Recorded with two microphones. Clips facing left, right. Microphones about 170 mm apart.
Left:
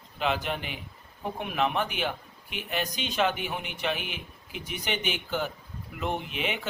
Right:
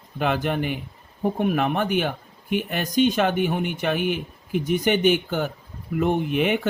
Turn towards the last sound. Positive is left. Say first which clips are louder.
# right 10 dB
turn(degrees=-55)  # may be behind; listen again after turning